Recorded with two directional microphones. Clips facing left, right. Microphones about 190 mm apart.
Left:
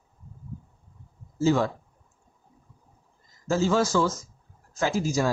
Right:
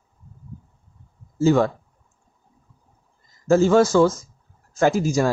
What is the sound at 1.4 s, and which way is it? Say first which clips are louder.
Speech: right 5 dB; 55° right (ahead or behind).